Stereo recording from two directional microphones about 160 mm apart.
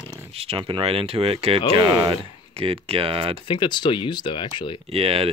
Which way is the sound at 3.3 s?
30° left (ahead or behind).